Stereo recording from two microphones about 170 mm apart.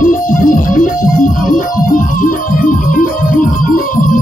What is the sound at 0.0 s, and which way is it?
Music, 50° left (ahead or behind).